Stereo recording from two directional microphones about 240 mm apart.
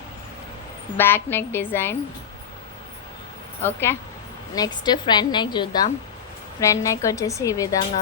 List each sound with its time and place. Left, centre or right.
0.9 s a woman's voice: centre
3.6 s a woman's voice: centre